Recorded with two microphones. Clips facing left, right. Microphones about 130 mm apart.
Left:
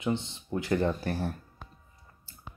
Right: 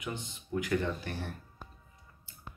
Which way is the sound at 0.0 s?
25° left (ahead or behind).